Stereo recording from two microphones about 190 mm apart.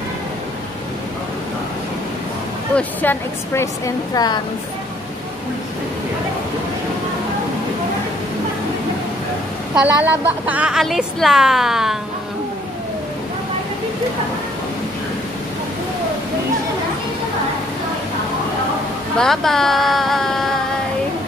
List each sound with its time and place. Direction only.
2.7 s speech: 10° left (ahead or behind)
9.8 s a woman's voice: 10° right (ahead or behind)
19.1 s a woman's voice: centre (ahead or behind)